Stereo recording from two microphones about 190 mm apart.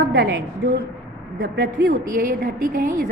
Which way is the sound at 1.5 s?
60° right (ahead or behind).